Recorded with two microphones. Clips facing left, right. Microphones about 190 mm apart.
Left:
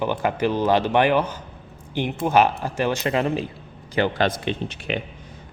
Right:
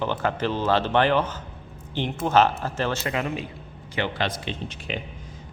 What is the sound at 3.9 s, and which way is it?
A man's voice, 45° left (ahead or behind).